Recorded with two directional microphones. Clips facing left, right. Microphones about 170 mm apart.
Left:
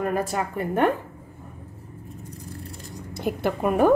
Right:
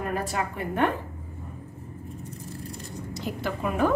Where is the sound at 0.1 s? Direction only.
45° left (ahead or behind).